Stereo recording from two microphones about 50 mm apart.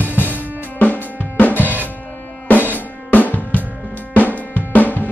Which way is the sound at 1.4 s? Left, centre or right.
Left.